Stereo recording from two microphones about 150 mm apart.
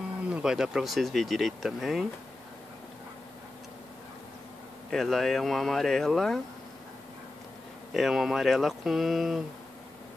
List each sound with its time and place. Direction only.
0.3 s speech: 5° right (ahead or behind)
4.9 s speech: centre (ahead or behind)
7.9 s speech: centre (ahead or behind)